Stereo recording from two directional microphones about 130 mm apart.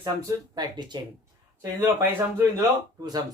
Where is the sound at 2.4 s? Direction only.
30° right (ahead or behind).